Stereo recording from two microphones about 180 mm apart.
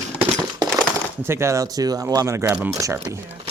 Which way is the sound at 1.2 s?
15° right (ahead or behind).